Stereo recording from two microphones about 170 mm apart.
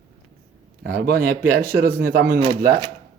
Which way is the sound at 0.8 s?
65° right (ahead or behind).